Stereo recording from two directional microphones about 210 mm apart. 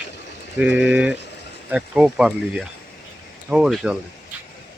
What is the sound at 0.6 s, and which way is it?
Speech, 5° right (ahead or behind).